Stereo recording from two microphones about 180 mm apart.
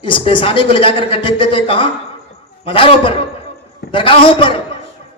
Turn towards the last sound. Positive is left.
turn(degrees=30)  # may be behind; listen again after turning